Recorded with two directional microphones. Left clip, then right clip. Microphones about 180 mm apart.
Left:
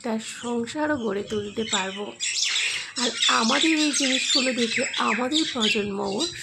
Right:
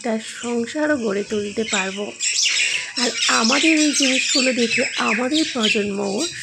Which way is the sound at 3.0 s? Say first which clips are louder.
Right 2 dB; 25° right (ahead or behind).